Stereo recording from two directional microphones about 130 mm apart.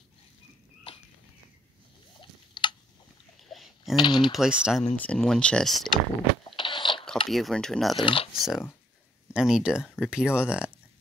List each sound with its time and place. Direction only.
2.6 s a sound: 40° left (ahead or behind)
3.4 s a sound: centre (ahead or behind)
3.9 s speech: 40° left (ahead or behind)
4.3 s speech: 5° right (ahead or behind)
4.9 s speech: 10° left (ahead or behind)
6.5 s a sound: 40° left (ahead or behind)
7.2 s speech: centre (ahead or behind)
8.0 s speech: 45° left (ahead or behind)
8.4 s speech: 5° right (ahead or behind)